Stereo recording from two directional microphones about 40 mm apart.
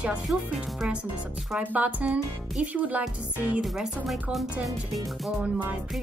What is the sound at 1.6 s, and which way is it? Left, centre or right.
Music, right.